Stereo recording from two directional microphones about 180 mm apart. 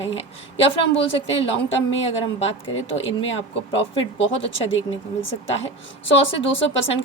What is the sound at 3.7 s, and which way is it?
Speech, 30° left (ahead or behind).